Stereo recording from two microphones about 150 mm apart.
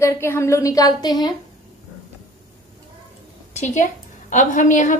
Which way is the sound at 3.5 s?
50° left (ahead or behind).